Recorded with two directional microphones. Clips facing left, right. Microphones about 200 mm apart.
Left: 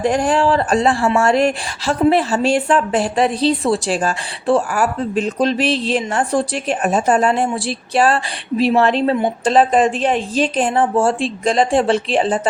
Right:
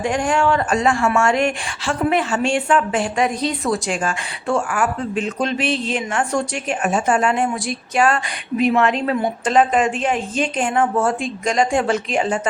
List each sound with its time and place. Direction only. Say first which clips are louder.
0.0 s a woman's voice: left 3 dB; 35° left (ahead or behind)